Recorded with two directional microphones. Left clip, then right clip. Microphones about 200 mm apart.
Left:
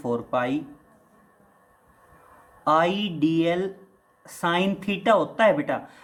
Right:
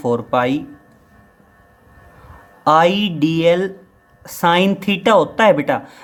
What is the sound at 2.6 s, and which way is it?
A woman's voice, 40° right (ahead or behind).